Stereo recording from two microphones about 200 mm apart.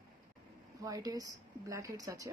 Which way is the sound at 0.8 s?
15° right (ahead or behind).